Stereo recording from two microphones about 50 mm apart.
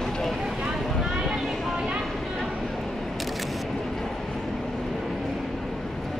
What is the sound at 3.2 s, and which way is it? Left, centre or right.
Single-lens reflex camera, centre.